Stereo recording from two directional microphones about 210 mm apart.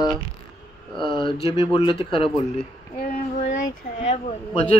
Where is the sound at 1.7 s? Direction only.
25° left (ahead or behind).